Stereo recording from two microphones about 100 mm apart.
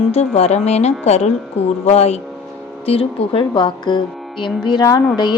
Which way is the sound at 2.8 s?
75° left (ahead or behind).